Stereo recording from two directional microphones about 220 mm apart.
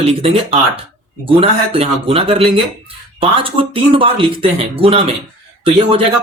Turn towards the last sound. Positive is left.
turn(degrees=-25)  # may be behind; listen again after turning